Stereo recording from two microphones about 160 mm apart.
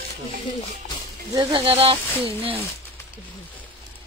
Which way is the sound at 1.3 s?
30° right (ahead or behind).